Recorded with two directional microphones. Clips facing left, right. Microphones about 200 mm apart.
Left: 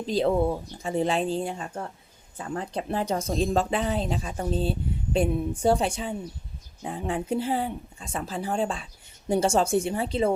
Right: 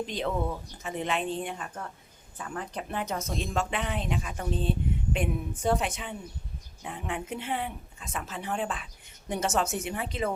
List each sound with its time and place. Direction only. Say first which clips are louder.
0.0 s speech: left 7 dB; 35° left (ahead or behind)